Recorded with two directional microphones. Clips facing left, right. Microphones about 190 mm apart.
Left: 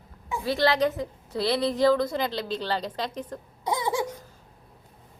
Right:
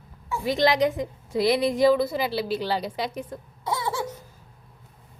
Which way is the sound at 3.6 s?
15° left (ahead or behind).